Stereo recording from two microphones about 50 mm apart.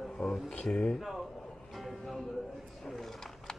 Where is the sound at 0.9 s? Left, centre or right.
Centre.